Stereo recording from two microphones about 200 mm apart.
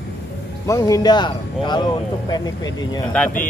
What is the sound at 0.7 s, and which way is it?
A man's voice, 15° left (ahead or behind).